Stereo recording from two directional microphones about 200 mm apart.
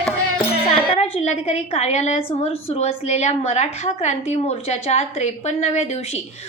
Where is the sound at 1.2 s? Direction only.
35° left (ahead or behind).